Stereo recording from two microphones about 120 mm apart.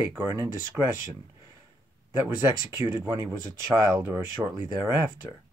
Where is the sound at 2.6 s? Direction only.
25° right (ahead or behind).